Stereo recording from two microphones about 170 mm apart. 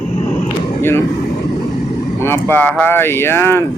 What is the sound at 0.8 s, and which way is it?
Speech, 15° left (ahead or behind).